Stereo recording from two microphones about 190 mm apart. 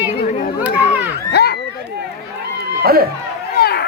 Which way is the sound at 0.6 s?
10° right (ahead or behind).